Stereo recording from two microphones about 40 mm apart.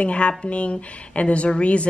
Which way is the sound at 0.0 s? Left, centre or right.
Left.